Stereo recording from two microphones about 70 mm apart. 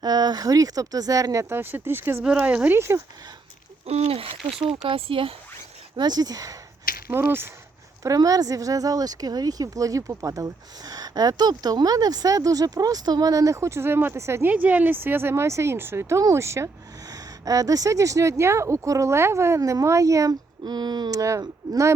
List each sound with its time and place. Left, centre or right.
0.0 s speech: right
2.2 s speech: centre
2.7 s speech: right
6.0 s speech: right
7.1 s speech: right
8.0 s speech: right
14.4 s speech: right
17.1 s speech: right
20.7 s speech: right
21.1 s speech: right
21.6 s speech: right